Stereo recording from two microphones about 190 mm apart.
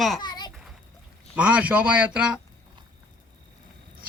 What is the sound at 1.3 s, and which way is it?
A man's voice, 5° right (ahead or behind).